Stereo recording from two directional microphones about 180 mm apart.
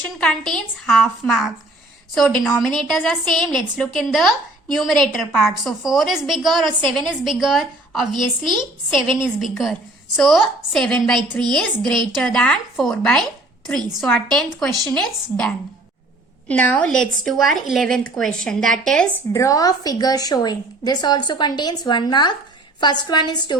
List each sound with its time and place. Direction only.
0.2 s a woman's voice: centre (ahead or behind)
14.9 s a woman's voice: 5° left (ahead or behind)
19.3 s a woman's voice: 20° left (ahead or behind)